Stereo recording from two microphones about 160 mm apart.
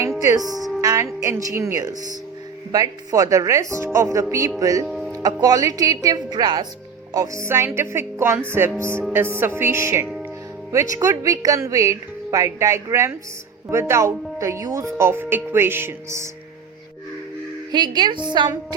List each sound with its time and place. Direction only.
0.2 s a woman's voice: 20° right (ahead or behind)
0.8 s music: 20° right (ahead or behind)
1.2 s a woman's voice: 20° right (ahead or behind)
4.9 s music: centre (ahead or behind)
5.2 s a woman's voice: 20° right (ahead or behind)
17.7 s a woman's voice: 25° right (ahead or behind)